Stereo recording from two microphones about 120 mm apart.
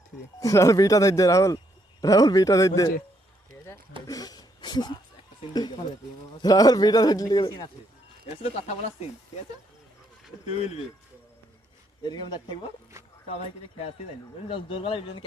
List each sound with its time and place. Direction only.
0.3 s speech: 25° left (ahead or behind)
4.0 s speech: 30° left (ahead or behind)
6.4 s a man's voice: 30° left (ahead or behind)
8.4 s speech: 60° left (ahead or behind)
10.4 s speech: 60° left (ahead or behind)
12.0 s a man's voice: 40° left (ahead or behind)
13.2 s speech: 60° left (ahead or behind)
14.4 s speech: 45° left (ahead or behind)